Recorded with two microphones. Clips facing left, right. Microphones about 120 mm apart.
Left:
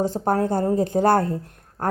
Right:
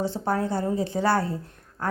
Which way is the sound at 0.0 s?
45° left (ahead or behind).